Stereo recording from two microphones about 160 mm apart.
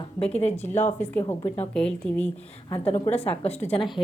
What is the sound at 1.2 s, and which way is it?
Speech, 30° left (ahead or behind).